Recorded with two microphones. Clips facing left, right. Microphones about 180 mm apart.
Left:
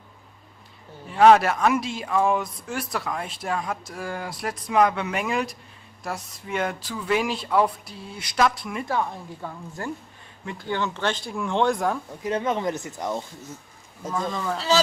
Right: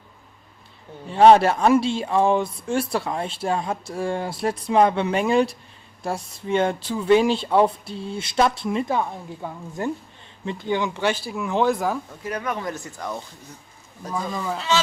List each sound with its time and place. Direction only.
1.0 s speech: 30° right (ahead or behind); by 12.0 s centre (ahead or behind)
12.1 s speech: 20° left (ahead or behind)
14.2 s speech: 5° right (ahead or behind)